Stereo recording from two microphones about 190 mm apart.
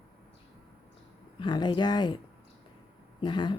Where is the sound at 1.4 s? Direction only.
25° left (ahead or behind).